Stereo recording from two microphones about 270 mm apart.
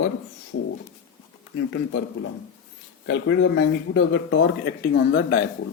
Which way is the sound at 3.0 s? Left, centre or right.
Left.